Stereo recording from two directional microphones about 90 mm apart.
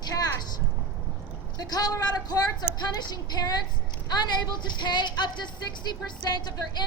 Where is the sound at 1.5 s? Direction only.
50° left (ahead or behind).